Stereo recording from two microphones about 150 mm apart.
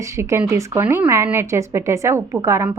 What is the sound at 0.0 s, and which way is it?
Speech, 20° right (ahead or behind).